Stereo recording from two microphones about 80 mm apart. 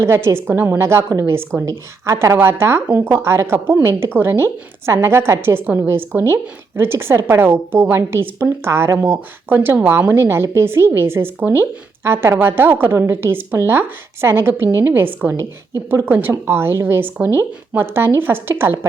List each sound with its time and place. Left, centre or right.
0.0 s a woman's voice: right